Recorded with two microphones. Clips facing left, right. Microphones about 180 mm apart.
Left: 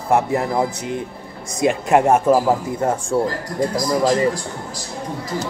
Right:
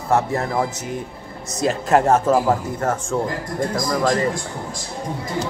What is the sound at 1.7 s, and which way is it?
Speech, 10° left (ahead or behind).